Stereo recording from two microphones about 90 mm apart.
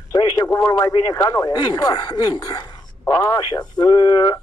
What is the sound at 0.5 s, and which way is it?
A woman's voice, 45° left (ahead or behind).